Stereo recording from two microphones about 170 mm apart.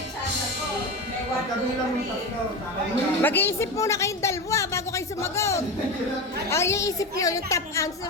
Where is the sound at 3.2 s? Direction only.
10° left (ahead or behind).